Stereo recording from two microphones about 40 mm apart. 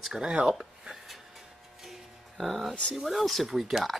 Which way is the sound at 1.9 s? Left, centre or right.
Centre.